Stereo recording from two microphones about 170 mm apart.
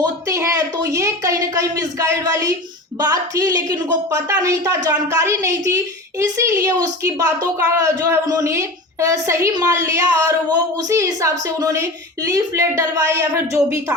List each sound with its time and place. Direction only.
0.0 s a woman's voice: 20° right (ahead or behind)